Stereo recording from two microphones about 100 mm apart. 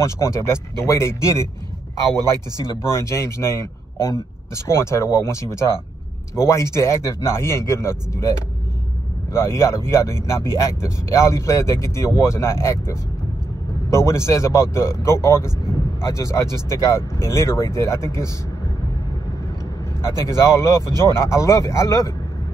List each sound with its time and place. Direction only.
0.0 s speech: 30° left (ahead or behind)
2.8 s speech: 30° left (ahead or behind)
20.0 s speech: 30° left (ahead or behind)
20.9 s speech: 45° right (ahead or behind)
21.2 s speech: 30° left (ahead or behind)